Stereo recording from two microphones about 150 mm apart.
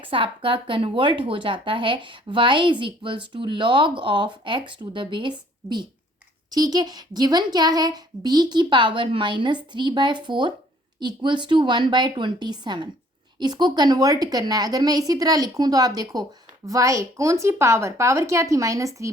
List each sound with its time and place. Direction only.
0.0 s a woman's voice: 35° right (ahead or behind)